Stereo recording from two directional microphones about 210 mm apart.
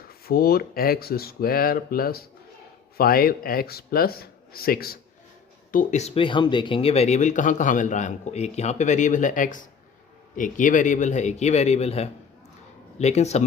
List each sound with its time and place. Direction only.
0.3 s speech: 45° left (ahead or behind)
5.7 s speech: 35° left (ahead or behind)